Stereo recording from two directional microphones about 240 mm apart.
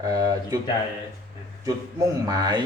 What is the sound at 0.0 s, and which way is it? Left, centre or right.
Speech, centre.